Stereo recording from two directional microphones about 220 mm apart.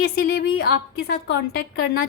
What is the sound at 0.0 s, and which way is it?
A woman's voice, 45° left (ahead or behind).